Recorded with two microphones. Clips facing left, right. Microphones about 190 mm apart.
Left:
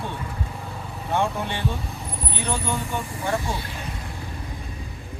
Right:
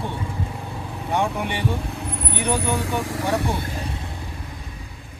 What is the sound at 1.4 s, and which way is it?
Speech, 15° right (ahead or behind).